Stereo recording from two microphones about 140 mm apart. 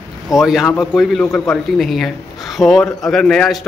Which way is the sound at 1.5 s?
Centre (ahead or behind).